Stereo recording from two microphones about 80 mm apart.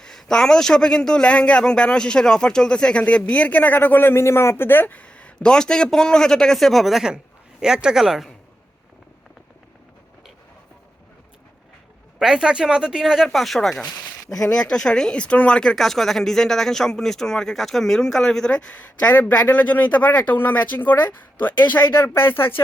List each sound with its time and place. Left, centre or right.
0.0 s speech: centre
12.2 s speech: centre
13.8 s a sound: left
14.5 s speech: centre; by 22.6 s left